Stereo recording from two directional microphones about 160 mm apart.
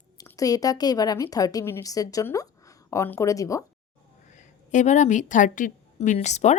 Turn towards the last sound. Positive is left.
turn(degrees=45)  # may be behind; listen again after turning